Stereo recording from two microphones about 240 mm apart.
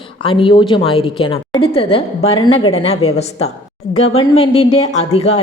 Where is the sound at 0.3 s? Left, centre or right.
Left.